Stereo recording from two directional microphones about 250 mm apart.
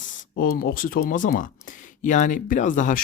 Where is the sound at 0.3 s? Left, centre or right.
Left.